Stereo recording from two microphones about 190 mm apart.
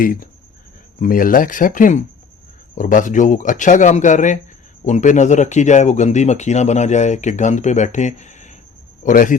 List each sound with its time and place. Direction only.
0.0 s speech: 50° left (ahead or behind)